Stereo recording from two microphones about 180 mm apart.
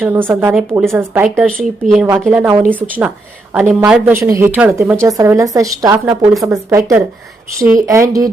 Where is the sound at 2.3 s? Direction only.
10° right (ahead or behind).